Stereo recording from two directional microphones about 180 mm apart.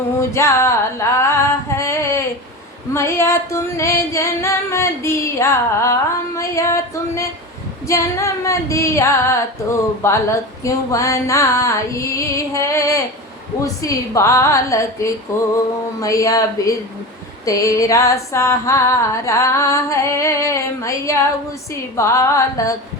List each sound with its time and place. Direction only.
0.2 s female singing: 15° left (ahead or behind)
6.3 s a sound: 15° left (ahead or behind)
7.9 s female singing: 15° left (ahead or behind)